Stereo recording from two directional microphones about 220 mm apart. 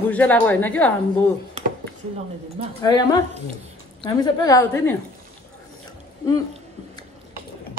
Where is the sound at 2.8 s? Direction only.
20° left (ahead or behind).